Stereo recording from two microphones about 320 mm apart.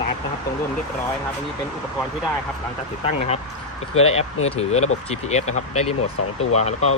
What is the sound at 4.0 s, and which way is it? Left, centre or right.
Speech, centre.